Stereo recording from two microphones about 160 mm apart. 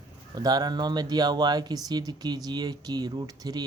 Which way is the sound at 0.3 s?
25° right (ahead or behind).